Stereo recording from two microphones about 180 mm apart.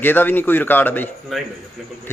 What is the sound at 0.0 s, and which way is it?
Speech, 10° left (ahead or behind).